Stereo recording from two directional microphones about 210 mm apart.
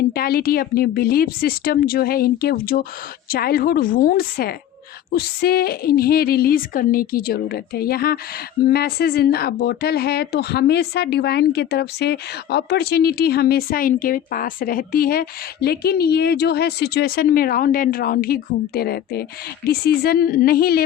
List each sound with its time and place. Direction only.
0.1 s speech: 45° left (ahead or behind)